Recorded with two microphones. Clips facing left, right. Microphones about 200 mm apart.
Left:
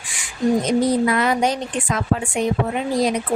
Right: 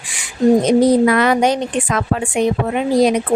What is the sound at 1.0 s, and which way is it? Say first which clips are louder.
A woman's voice: right 5 dB; 75° right (ahead or behind).